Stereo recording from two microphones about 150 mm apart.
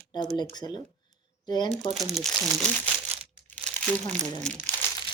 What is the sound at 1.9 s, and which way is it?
Speech, centre (ahead or behind).